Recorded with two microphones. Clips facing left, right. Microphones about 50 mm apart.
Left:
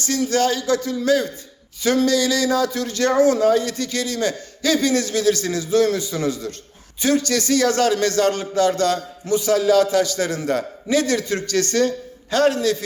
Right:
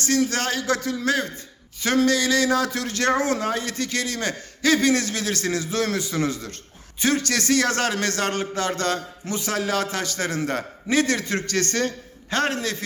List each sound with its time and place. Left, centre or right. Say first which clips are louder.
0.0 s a man's voice: left 3 dB; right
1.8 s speech: left 2 dB; right
6.1 s a man's voice: left 2 dB; right